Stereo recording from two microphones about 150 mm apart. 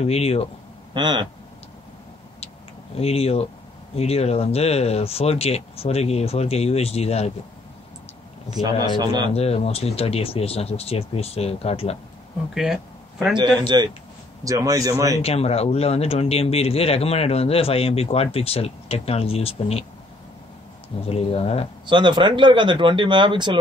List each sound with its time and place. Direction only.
0.0 s speech: 45° left (ahead or behind)
0.9 s a man's voice: 30° right (ahead or behind)
2.4 s a sound: 40° left (ahead or behind)
3.9 s speech: 45° left (ahead or behind)
8.6 s a man's voice: 30° right (ahead or behind)
9.3 s speech: 45° left (ahead or behind)
12.5 s speech: centre (ahead or behind)
13.7 s a man's voice: 30° right (ahead or behind)
15.2 s speech: 45° left (ahead or behind)
21.0 s speech: 40° left (ahead or behind)
21.8 s speech: 30° right (ahead or behind)